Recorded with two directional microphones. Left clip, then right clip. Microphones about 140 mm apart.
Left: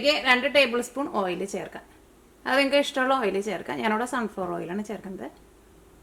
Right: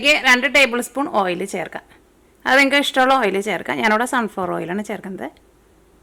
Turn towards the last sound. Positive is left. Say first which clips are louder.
# right 7 dB
turn(degrees=-30)  # may be behind; listen again after turning